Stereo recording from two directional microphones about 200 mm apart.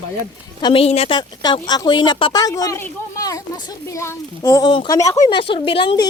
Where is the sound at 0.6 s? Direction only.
25° left (ahead or behind).